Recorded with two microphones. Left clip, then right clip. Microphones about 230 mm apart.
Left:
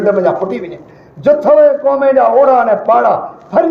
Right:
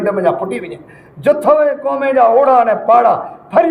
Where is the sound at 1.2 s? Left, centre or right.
Right.